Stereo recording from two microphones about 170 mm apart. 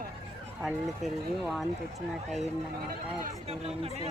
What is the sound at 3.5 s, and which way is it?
Speech, 35° right (ahead or behind).